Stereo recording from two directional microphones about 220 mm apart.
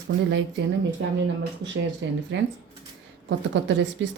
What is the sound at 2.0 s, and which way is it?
Speech, 55° right (ahead or behind).